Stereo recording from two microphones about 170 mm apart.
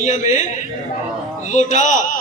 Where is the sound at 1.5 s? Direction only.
45° left (ahead or behind).